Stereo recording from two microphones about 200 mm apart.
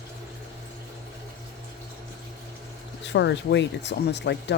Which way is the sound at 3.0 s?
60° left (ahead or behind).